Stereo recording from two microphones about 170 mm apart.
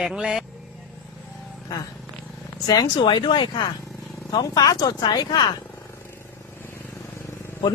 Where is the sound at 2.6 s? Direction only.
25° left (ahead or behind).